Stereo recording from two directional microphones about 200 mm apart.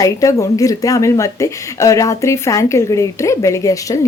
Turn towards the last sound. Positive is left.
turn(degrees=15)  # may be behind; listen again after turning